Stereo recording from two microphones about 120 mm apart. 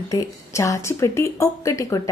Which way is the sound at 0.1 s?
25° left (ahead or behind).